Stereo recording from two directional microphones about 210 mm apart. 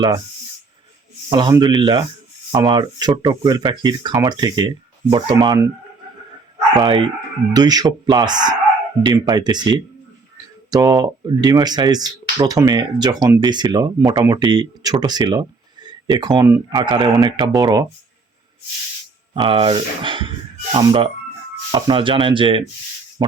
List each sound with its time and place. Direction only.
1.3 s speech: 20° right (ahead or behind)
6.7 s speech: 20° right (ahead or behind)
19.3 s speech: 25° right (ahead or behind)